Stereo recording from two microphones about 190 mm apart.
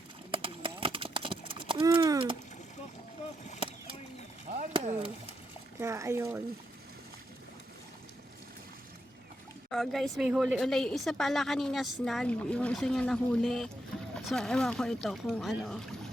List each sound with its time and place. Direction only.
0.3 s clip-clop: 30° right (ahead or behind)
4.7 s a sound: 30° right (ahead or behind)
5.8 s speech: 15° right (ahead or behind)
9.6 s a woman's voice: centre (ahead or behind)